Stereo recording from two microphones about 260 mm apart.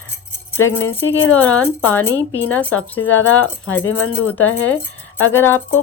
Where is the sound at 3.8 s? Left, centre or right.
Left.